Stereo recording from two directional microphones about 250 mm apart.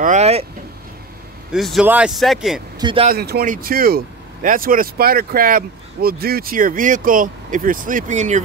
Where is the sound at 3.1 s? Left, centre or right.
Right.